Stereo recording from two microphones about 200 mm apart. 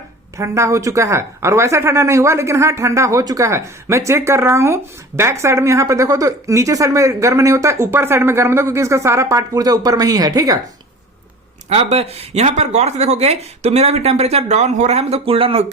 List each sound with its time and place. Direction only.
0.3 s speech: 15° right (ahead or behind)
11.7 s speech: 30° right (ahead or behind)